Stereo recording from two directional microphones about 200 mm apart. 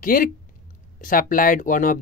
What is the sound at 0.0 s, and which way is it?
Speech, 45° left (ahead or behind).